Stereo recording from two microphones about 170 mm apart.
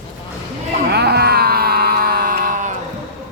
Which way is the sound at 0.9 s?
70° right (ahead or behind).